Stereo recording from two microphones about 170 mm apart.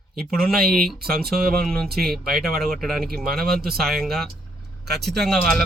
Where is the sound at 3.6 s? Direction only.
65° right (ahead or behind).